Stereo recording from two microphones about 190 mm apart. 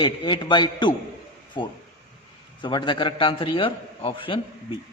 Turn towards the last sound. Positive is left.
turn(degrees=25)  # may be behind; listen again after turning